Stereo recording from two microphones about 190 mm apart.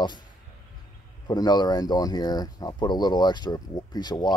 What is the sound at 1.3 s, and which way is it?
Speech, 20° left (ahead or behind).